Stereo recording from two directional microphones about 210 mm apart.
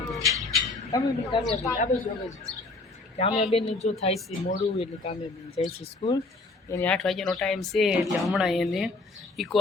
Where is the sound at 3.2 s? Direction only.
30° left (ahead or behind).